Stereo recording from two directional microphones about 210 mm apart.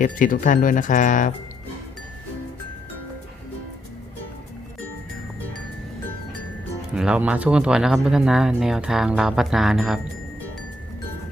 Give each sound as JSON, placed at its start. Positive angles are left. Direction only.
{"t": 0.0, "sound": "speech", "side_deg": 40}
{"t": 6.9, "sound": "speech", "side_deg": -5}